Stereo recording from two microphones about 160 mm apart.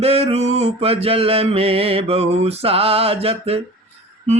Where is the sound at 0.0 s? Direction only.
40° right (ahead or behind).